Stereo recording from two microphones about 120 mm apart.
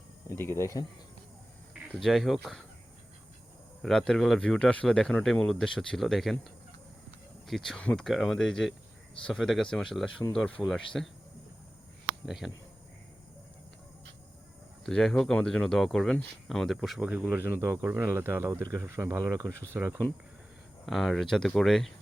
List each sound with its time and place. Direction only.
0.3 s speech: 20° left (ahead or behind)
1.9 s speech: centre (ahead or behind)
3.8 s speech: 5° left (ahead or behind)
12.2 s speech: centre (ahead or behind)
14.8 s speech: 5° left (ahead or behind)
17.1 s speech: 15° right (ahead or behind)
20.8 s speech: centre (ahead or behind)